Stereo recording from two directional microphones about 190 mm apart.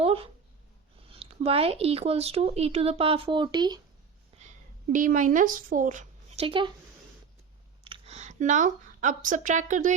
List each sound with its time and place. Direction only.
1.1 s speech: 30° right (ahead or behind)
4.9 s a woman's voice: 45° right (ahead or behind); by 6.7 s 30° right (ahead or behind)
7.9 s speech: 30° right (ahead or behind)